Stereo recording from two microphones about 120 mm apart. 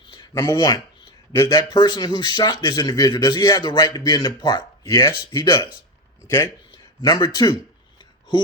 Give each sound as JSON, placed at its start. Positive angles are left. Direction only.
{"t": 0.1, "sound": "a sound", "side_deg": 40}
{"t": 0.4, "sound": "speech", "side_deg": 35}
{"t": 7.0, "sound": "speech", "side_deg": 35}